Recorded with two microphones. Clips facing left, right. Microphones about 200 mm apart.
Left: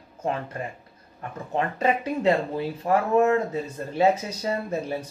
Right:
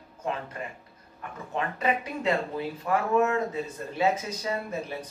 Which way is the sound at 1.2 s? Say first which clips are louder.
Left 5 dB; 35° left (ahead or behind).